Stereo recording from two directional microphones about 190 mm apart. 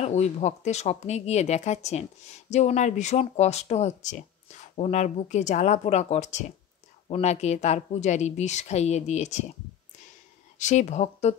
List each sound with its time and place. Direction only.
0.0 s speech: 35° left (ahead or behind)
10.6 s speech: 40° left (ahead or behind)